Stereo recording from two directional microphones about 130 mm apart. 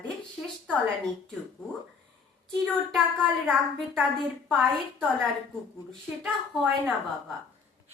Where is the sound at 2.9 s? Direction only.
Centre (ahead or behind).